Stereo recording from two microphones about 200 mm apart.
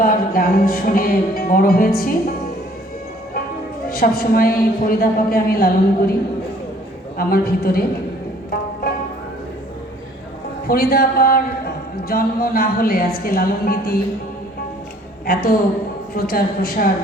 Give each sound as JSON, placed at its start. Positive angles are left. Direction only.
{"t": 0.0, "sound": "music", "side_deg": 45}
{"t": 3.8, "sound": "a man's voice", "side_deg": 50}
{"t": 7.2, "sound": "a man's voice", "side_deg": 50}
{"t": 10.7, "sound": "a man's voice", "side_deg": 50}
{"t": 15.3, "sound": "a man's voice", "side_deg": 50}